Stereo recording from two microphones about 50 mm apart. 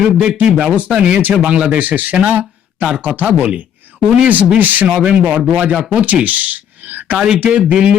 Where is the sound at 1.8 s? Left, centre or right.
Right.